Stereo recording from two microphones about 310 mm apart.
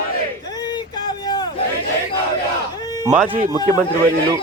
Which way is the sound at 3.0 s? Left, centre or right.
Centre.